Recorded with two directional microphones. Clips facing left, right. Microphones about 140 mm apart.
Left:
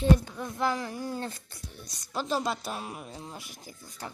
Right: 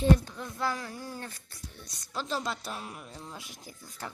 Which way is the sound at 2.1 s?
10° left (ahead or behind).